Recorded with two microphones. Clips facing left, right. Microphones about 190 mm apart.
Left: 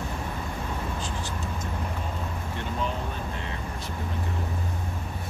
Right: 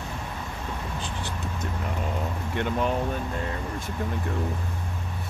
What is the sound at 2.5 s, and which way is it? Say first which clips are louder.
Speech: right 6 dB; 65° right (ahead or behind).